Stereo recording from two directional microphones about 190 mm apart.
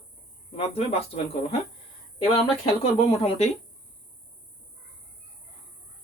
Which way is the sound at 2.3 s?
30° left (ahead or behind).